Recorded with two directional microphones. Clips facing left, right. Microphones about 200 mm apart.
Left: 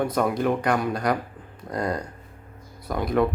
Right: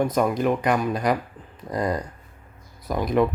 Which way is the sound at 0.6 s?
Centre (ahead or behind).